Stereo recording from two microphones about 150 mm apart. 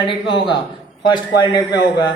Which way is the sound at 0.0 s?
30° left (ahead or behind).